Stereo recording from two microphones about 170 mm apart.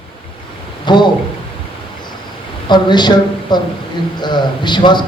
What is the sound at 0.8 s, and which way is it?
Speech, 25° left (ahead or behind).